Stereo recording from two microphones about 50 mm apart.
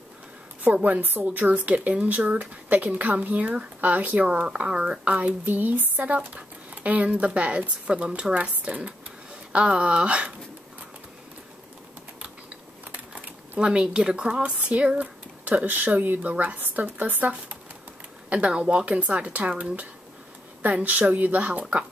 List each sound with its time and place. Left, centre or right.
0.8 s speech: right
5.2 s speech: right
13.6 s speech: centre; by 17.3 s right
18.3 s speech: right